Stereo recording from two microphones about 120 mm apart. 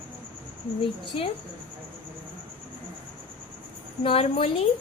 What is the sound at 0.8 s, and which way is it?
Speech, 45° left (ahead or behind).